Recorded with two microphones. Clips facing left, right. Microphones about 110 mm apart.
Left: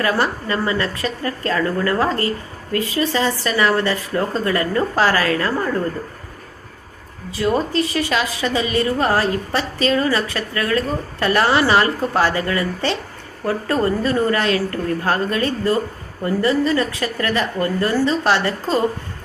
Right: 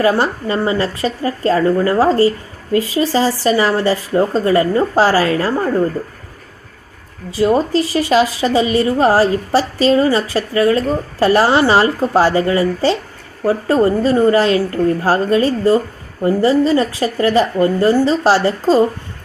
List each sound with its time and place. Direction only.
0.0 s speech: 25° right (ahead or behind)
7.3 s a woman's voice: 30° right (ahead or behind)